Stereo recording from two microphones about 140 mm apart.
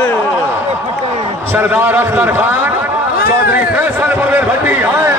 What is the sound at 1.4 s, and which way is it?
A man's voice, 15° right (ahead or behind).